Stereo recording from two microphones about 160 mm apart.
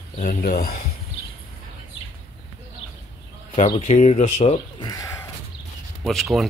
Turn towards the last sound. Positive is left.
turn(degrees=0)  # may be behind; listen again after turning